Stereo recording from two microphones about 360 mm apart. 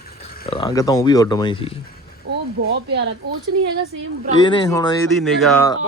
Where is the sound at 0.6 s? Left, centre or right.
Centre.